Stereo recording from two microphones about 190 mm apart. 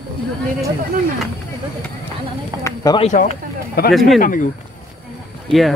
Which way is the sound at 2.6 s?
20° left (ahead or behind).